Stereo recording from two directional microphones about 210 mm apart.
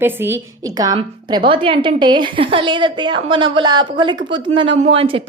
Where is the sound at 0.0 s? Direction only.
10° right (ahead or behind).